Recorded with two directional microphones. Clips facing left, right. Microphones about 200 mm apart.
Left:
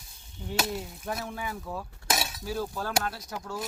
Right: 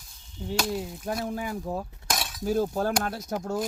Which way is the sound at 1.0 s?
35° right (ahead or behind).